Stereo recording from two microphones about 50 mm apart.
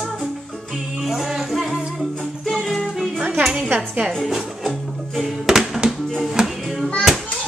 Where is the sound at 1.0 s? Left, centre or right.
Centre.